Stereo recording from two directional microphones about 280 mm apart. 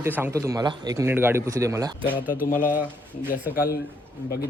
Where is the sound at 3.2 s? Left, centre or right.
Centre.